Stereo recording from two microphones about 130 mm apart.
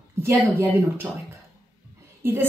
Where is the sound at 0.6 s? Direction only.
20° right (ahead or behind).